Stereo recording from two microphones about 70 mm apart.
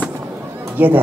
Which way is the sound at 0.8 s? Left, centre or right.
Right.